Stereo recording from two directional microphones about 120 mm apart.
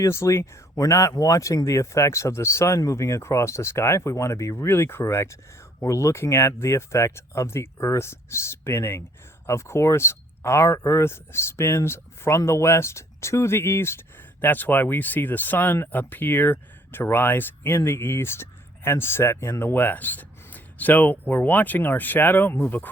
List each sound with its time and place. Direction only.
0.0 s speech: 25° left (ahead or behind)